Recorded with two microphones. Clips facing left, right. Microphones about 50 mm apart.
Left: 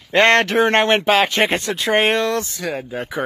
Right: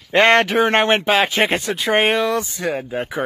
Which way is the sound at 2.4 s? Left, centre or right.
Right.